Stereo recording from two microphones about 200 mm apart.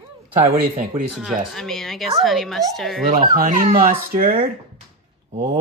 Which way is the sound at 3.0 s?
45° right (ahead or behind).